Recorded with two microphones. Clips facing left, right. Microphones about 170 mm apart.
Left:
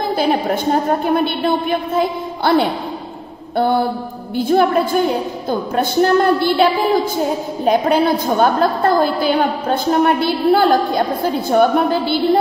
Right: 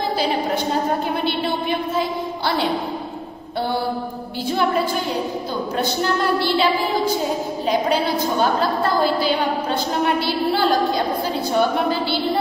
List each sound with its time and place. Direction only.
0.1 s a woman's voice: 55° left (ahead or behind)